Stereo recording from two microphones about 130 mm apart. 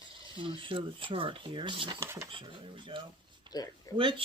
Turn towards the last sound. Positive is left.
turn(degrees=30)  # may be behind; listen again after turning